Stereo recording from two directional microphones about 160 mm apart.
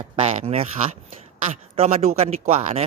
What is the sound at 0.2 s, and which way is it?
A man's voice, 40° right (ahead or behind).